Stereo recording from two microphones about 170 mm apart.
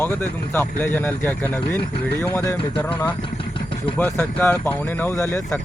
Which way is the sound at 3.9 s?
10° left (ahead or behind).